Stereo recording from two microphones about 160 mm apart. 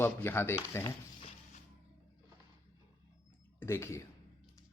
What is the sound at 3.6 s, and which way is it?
Speech, 15° left (ahead or behind).